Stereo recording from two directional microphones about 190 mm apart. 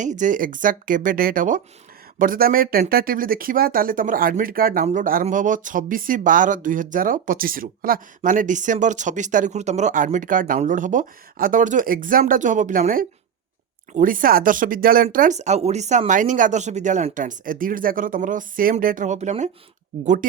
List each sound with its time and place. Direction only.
0.0 s speech: 40° right (ahead or behind)